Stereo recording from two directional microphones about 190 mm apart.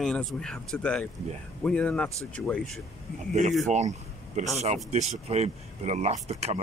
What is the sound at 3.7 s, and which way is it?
Speech, 40° right (ahead or behind).